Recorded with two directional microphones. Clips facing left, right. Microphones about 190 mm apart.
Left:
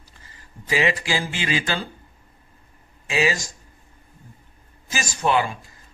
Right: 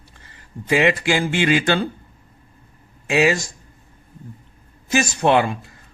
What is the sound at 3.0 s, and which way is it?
Speech, 60° right (ahead or behind).